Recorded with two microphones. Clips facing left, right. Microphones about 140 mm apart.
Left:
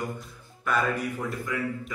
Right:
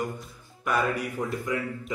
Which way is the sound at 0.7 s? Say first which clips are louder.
Even; 15° right (ahead or behind).